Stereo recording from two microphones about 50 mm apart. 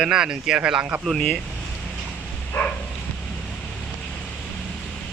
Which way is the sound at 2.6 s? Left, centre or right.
Left.